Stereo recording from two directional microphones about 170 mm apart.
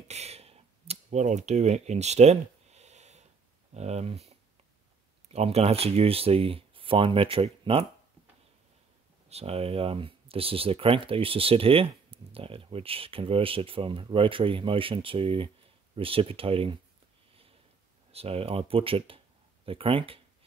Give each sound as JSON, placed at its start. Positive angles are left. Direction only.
{"t": 0.1, "sound": "a sound", "side_deg": -40}
{"t": 3.7, "sound": "speech", "side_deg": -40}
{"t": 9.3, "sound": "speech", "side_deg": -35}
{"t": 17.3, "sound": "sniff", "side_deg": -35}
{"t": 18.1, "sound": "speech", "side_deg": -35}